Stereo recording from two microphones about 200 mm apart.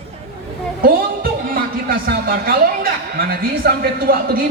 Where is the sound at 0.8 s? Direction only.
45° right (ahead or behind).